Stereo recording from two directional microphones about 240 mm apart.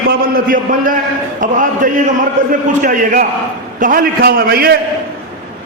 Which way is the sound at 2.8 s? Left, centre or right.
Right.